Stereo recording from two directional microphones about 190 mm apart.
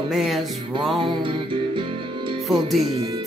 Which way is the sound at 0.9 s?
25° right (ahead or behind).